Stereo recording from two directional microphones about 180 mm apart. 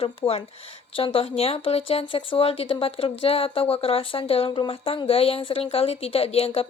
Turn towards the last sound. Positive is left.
turn(degrees=35)  # may be behind; listen again after turning